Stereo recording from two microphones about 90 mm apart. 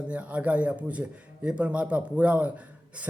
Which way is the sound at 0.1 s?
15° right (ahead or behind).